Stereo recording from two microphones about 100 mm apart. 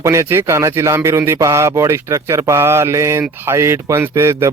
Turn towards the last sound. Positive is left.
turn(degrees=-30)  # may be behind; listen again after turning